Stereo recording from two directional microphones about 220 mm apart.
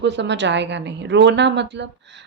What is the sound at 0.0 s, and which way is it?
A woman's voice, 55° right (ahead or behind).